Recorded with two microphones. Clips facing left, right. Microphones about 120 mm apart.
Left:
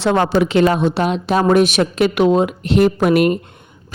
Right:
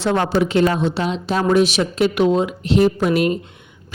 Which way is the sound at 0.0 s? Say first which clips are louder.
Left 3 dB; 85° left.